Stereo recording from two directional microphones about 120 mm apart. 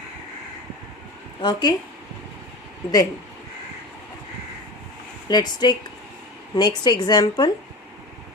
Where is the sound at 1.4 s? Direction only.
35° left (ahead or behind).